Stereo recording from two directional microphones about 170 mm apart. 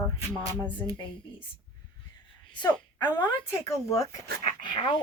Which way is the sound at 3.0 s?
25° left (ahead or behind).